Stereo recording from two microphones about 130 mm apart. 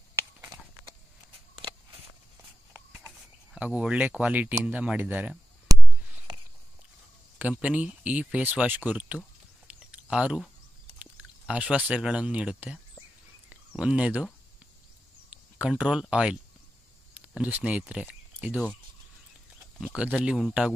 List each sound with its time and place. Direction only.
3.5 s speech: 10° right (ahead or behind)
5.7 s a sound: 25° right (ahead or behind)
7.3 s speech: 10° right (ahead or behind)
9.7 s a sound: 10° right (ahead or behind)
11.0 s speech: 10° right (ahead or behind)
13.5 s a sound: 10° right (ahead or behind)
15.6 s speech: 5° right (ahead or behind)
17.4 s speech: 10° right (ahead or behind)
20.0 s speech: 10° right (ahead or behind)